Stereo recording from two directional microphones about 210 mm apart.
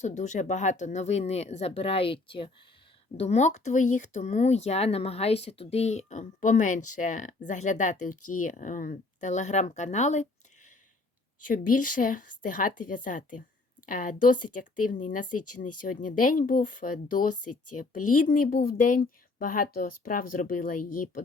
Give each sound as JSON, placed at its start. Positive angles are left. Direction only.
{"t": 0.0, "sound": "speech", "side_deg": 35}
{"t": 17.4, "sound": "speech", "side_deg": 90}
{"t": 18.1, "sound": "speech", "side_deg": 40}